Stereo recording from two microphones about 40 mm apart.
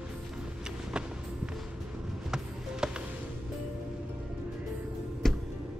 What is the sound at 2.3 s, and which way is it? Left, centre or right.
Music, centre.